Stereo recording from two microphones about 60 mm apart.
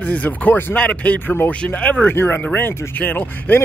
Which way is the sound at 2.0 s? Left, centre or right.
Left.